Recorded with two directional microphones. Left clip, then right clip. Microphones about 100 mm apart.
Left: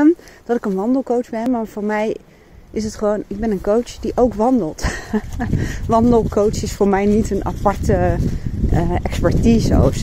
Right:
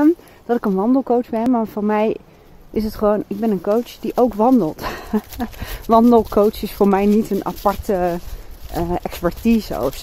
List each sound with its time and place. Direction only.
0.0 s speech: 15° right (ahead or behind)
1.5 s speech: 30° right (ahead or behind)
3.3 s speech: 5° right (ahead or behind)
4.5 s speech: 15° right (ahead or behind)
5.7 s speech: 20° right (ahead or behind)
6.9 s speech: 10° right (ahead or behind)
9.4 s speech: 5° right (ahead or behind)